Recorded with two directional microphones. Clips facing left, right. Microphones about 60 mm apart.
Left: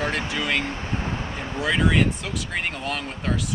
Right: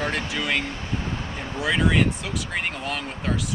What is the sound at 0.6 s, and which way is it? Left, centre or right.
Vehicle, left.